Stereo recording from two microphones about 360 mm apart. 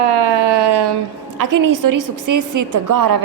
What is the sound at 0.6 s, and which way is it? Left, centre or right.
Speech, right.